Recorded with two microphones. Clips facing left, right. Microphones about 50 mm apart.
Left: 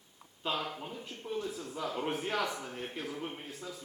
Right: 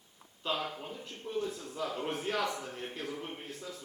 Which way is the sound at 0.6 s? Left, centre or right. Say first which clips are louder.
Even; centre.